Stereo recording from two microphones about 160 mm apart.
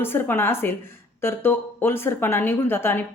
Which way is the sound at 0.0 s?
15° left (ahead or behind).